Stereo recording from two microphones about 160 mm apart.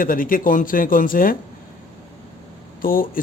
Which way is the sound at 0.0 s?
60° left (ahead or behind).